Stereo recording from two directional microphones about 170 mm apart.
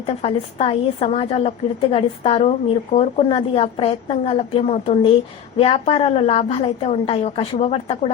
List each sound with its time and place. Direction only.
0.0 s a woman's voice: 30° left (ahead or behind)